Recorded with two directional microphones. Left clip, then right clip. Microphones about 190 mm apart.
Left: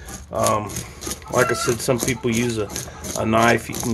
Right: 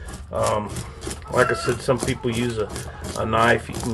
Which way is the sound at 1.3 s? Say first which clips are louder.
Left 1 dB; 35° left (ahead or behind).